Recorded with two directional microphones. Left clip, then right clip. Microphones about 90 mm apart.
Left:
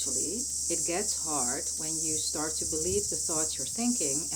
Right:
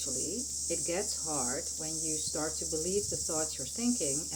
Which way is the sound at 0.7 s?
20° left (ahead or behind).